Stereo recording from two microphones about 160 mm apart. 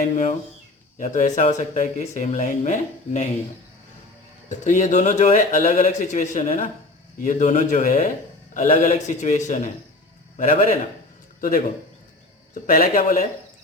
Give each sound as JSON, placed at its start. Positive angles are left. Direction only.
{"t": 0.0, "sound": "speech", "side_deg": 50}
{"t": 4.4, "sound": "a man's voice", "side_deg": 50}
{"t": 12.6, "sound": "speech", "side_deg": 60}